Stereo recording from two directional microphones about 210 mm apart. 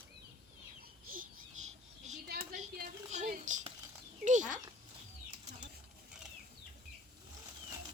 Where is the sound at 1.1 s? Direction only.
45° right (ahead or behind).